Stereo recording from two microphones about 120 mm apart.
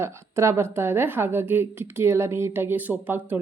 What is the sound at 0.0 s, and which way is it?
A woman's voice, 20° right (ahead or behind).